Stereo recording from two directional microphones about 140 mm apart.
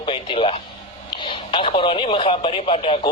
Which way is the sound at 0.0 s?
40° left (ahead or behind).